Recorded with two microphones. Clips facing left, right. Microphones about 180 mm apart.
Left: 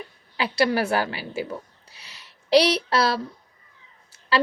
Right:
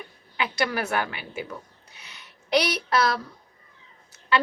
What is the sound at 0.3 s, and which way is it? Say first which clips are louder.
A woman's voice: left 5 dB; 30° left (ahead or behind).